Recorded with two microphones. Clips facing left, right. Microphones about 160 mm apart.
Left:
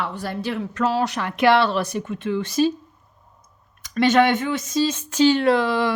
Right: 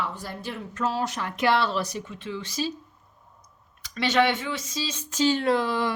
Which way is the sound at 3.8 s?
50° left (ahead or behind).